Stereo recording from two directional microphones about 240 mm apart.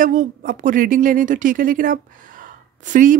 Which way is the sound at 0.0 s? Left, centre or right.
Right.